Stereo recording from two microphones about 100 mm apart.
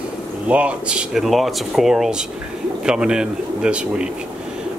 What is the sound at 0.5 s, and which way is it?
Speech, 10° right (ahead or behind).